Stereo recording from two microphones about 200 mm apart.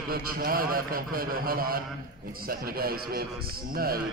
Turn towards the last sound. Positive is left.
turn(degrees=-50)  # may be behind; listen again after turning